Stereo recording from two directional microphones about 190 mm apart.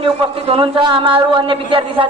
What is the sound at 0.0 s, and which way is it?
A man's voice, 30° right (ahead or behind).